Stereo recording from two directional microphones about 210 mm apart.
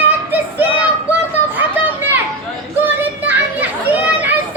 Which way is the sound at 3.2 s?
10° right (ahead or behind).